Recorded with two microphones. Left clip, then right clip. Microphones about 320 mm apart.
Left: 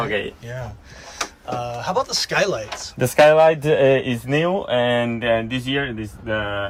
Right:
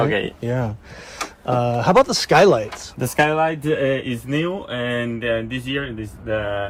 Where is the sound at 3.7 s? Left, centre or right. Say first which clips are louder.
Left 4 dB; left.